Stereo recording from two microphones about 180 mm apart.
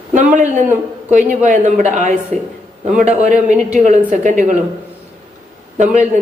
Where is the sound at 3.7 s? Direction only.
45° right (ahead or behind).